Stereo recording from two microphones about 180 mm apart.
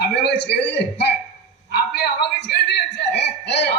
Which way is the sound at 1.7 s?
65° left (ahead or behind).